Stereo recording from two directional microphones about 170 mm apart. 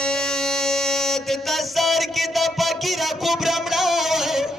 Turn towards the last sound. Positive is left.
turn(degrees=0)  # may be behind; listen again after turning